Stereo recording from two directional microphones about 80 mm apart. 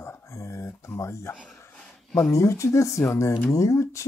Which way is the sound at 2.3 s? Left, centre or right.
Left.